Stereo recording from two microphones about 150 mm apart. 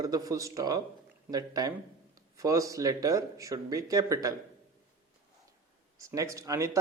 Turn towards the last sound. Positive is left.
turn(degrees=-20)  # may be behind; listen again after turning